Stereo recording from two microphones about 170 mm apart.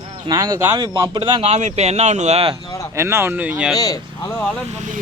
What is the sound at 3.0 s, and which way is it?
Speech, 15° right (ahead or behind).